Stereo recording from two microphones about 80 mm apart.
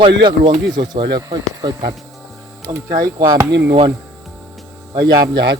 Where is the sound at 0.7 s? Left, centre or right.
Right.